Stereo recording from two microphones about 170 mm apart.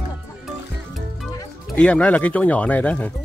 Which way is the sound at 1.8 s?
5° left (ahead or behind).